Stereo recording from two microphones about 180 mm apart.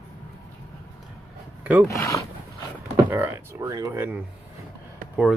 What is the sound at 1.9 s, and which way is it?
Speech, 15° left (ahead or behind).